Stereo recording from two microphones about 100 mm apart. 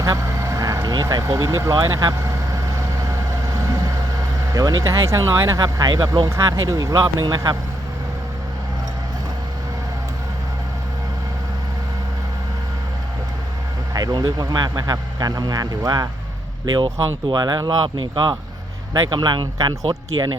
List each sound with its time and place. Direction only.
0.0 s vehicle: 35° right (ahead or behind)
4.5 s speech: 35° right (ahead or behind)
13.9 s speech: 45° right (ahead or behind)
16.7 s speech: 50° right (ahead or behind)